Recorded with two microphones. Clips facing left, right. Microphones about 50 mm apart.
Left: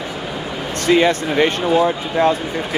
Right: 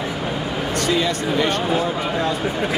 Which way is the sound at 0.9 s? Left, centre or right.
Left.